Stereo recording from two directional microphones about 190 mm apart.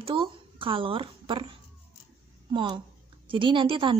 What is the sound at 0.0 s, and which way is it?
A woman's voice, 25° right (ahead or behind).